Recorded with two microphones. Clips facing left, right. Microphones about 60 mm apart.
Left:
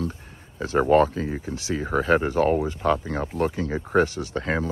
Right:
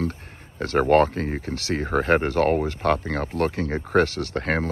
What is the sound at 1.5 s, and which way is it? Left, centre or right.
Speech, right.